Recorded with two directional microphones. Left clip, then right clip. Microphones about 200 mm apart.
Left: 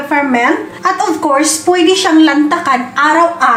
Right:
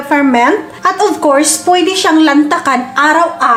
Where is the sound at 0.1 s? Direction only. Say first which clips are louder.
Right 2 dB; 45° right (ahead or behind).